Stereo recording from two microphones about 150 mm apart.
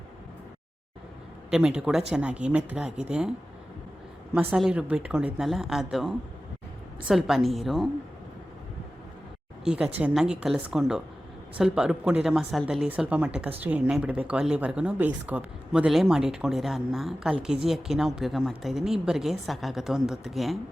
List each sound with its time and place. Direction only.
1.5 s a woman's voice: 5° right (ahead or behind)
4.4 s a woman's voice: 5° right (ahead or behind)
9.6 s a woman's voice: 5° right (ahead or behind)